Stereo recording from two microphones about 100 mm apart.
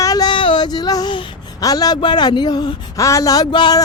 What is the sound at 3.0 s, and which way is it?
Speech, 35° left (ahead or behind).